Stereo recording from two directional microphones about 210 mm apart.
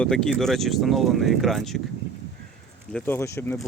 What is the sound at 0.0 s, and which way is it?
Speech, 5° left (ahead or behind).